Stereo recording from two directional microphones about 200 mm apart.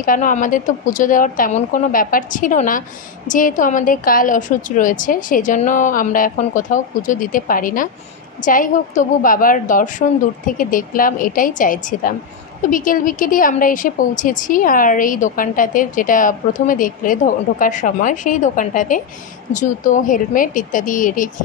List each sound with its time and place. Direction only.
0.0 s a woman's voice: 40° left (ahead or behind)